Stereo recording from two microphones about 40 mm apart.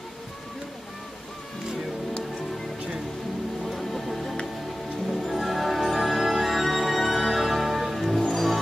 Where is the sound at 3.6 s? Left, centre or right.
Centre.